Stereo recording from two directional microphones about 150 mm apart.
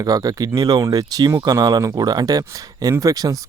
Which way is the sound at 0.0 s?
25° right (ahead or behind).